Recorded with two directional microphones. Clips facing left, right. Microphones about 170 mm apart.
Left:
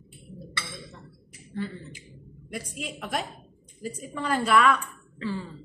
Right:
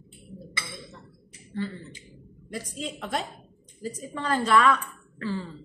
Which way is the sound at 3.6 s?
10° left (ahead or behind).